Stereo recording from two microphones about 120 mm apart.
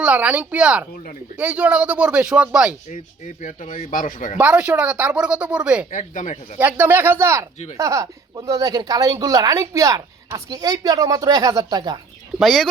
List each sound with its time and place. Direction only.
0.0 s a woman's voice: 10° right (ahead or behind)
2.9 s speech: 90° left
4.4 s a woman's voice: 10° right (ahead or behind)
5.9 s speech: 90° left
6.6 s a woman's voice: 15° right (ahead or behind); by 11.9 s 35° right (ahead or behind)
12.4 s speech: centre (ahead or behind)